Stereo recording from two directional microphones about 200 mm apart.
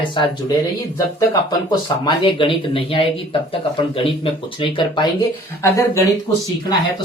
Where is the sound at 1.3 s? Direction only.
20° left (ahead or behind).